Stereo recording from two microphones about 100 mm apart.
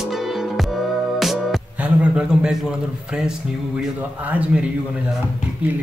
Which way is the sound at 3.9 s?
15° right (ahead or behind).